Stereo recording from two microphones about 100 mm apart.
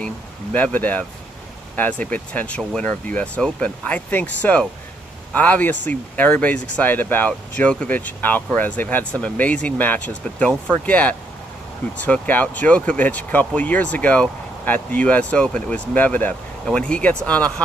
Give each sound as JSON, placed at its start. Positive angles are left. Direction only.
{"t": 0.0, "sound": "speech", "side_deg": 15}